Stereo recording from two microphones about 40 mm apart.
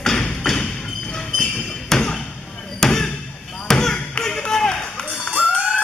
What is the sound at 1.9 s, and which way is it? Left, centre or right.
Thump, centre.